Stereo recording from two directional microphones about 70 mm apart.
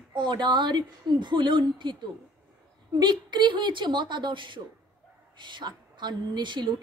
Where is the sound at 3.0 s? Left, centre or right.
Right.